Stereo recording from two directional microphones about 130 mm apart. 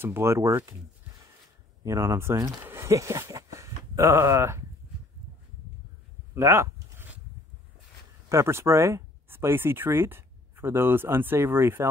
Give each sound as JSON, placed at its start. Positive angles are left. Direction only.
{"t": 0.0, "sound": "speech", "side_deg": -20}
{"t": 1.9, "sound": "speech", "side_deg": -20}
{"t": 6.3, "sound": "a sound", "side_deg": -20}
{"t": 8.3, "sound": "speech", "side_deg": -20}